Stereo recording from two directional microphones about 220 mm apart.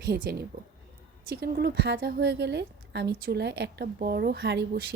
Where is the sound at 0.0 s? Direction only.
45° right (ahead or behind).